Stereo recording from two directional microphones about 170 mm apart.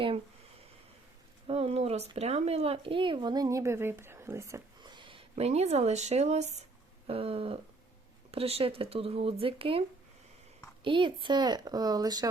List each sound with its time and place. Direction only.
1.5 s speech: 35° right (ahead or behind)
10.8 s speech: 30° right (ahead or behind)